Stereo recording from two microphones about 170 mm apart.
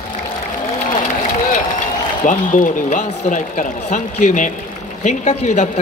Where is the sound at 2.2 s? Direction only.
50° left (ahead or behind).